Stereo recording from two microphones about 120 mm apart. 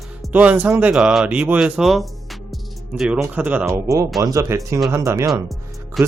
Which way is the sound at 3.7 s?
25° right (ahead or behind).